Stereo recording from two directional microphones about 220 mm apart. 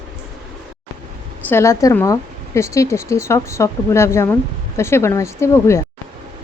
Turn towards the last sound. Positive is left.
turn(degrees=10)  # may be behind; listen again after turning